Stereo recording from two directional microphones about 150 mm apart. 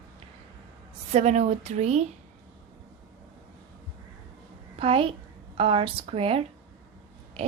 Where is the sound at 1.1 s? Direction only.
50° right (ahead or behind).